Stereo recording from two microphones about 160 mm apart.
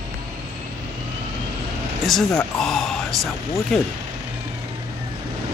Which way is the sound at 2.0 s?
Centre (ahead or behind).